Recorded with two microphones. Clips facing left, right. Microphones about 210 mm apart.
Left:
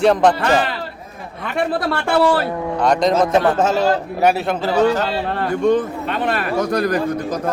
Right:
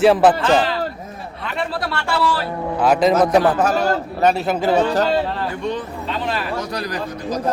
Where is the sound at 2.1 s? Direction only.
55° left (ahead or behind).